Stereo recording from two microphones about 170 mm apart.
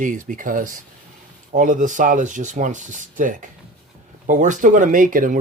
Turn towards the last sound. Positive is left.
turn(degrees=-55)  # may be behind; listen again after turning